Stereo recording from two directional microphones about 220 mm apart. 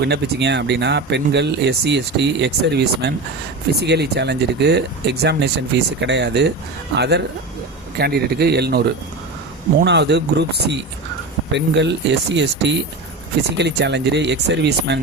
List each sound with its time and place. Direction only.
0.0 s speech: 50° right (ahead or behind)
9.8 s speech: 50° right (ahead or behind)